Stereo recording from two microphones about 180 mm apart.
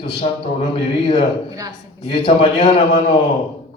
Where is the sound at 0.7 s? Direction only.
30° left (ahead or behind).